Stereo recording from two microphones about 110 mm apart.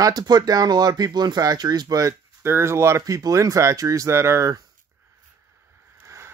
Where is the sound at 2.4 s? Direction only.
25° right (ahead or behind).